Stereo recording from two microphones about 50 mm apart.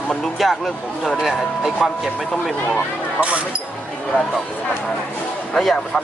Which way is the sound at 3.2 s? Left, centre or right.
Right.